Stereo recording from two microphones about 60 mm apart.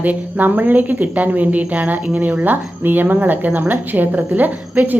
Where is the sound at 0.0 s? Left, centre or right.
Right.